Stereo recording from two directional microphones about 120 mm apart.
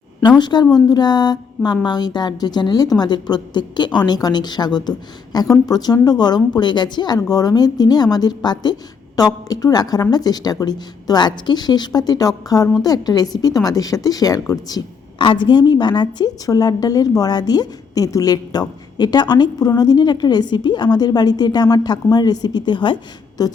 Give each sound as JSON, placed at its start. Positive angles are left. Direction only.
{"t": 0.2, "sound": "speech", "side_deg": 35}